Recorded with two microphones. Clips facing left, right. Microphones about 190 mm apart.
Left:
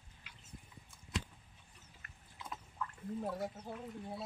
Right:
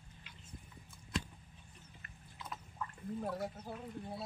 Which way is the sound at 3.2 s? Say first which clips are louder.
Even; 10° left (ahead or behind).